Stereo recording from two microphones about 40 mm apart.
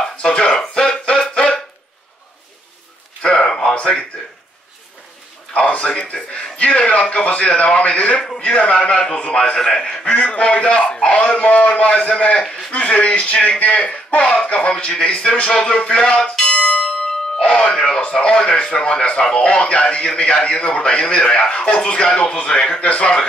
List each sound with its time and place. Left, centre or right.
0.4 s music: centre
1.0 s a sound: left
3.2 s a sound: left
4.1 s a man's voice: left
5.8 s a man's voice: left
10.0 s a man's voice: left
12.4 s a man's voice: centre
12.7 s a man's voice: left
15.6 s bell: left
18.1 s a man's voice: centre